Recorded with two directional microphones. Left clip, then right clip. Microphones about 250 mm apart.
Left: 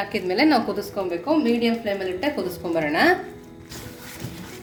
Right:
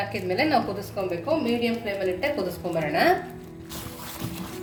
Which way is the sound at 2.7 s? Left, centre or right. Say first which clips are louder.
Left 3 dB; left.